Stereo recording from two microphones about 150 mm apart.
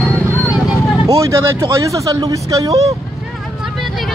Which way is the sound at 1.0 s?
20° right (ahead or behind).